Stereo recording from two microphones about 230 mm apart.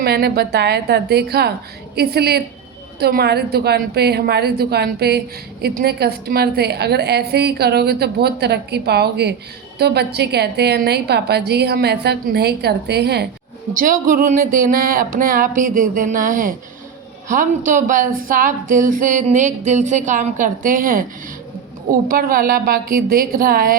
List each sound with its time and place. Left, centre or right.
0.0 s a woman's voice: right
22.1 s a woman's voice: right